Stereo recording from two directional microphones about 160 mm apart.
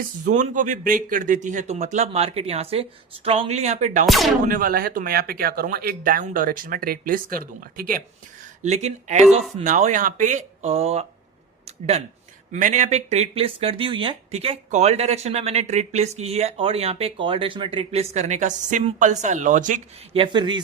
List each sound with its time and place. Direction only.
0.3 s speech: 50° right (ahead or behind)
4.0 s speech: centre (ahead or behind)
4.4 s speech: 60° right (ahead or behind)
8.6 s speech: 45° right (ahead or behind)
11.6 s a sound: 45° right (ahead or behind)
12.5 s speech: 50° right (ahead or behind)
20.1 s speech: 30° right (ahead or behind)